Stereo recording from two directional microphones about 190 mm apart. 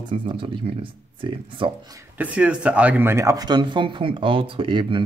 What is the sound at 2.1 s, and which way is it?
Speech, 5° right (ahead or behind).